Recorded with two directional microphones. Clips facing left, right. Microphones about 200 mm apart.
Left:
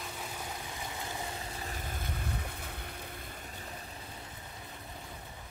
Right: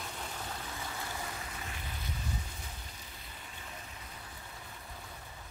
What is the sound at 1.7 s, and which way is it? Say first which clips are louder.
Boat: left 3 dB; 50° left (ahead or behind).